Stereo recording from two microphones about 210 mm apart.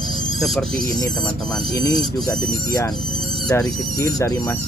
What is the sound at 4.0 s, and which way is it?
Speech, 15° left (ahead or behind).